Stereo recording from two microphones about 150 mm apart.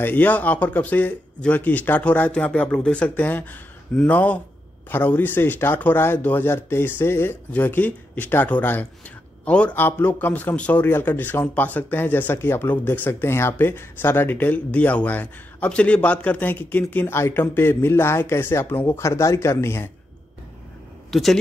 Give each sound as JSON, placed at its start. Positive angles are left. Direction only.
{"t": 0.0, "sound": "a man's voice", "side_deg": 10}
{"t": 21.1, "sound": "speech", "side_deg": 0}